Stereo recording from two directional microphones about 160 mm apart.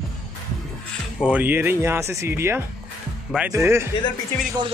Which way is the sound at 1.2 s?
10° right (ahead or behind).